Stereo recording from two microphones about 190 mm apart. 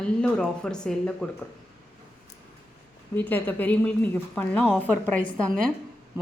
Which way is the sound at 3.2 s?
10° left (ahead or behind).